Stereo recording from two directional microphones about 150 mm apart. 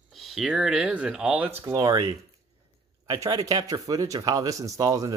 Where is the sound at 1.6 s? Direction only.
25° right (ahead or behind).